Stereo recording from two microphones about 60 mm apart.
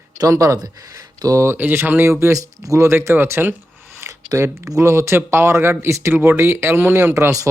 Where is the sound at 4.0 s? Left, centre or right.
Right.